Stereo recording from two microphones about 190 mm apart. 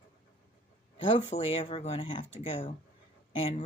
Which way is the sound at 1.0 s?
25° left (ahead or behind).